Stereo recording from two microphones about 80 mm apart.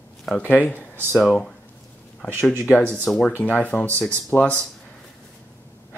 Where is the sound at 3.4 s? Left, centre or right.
Centre.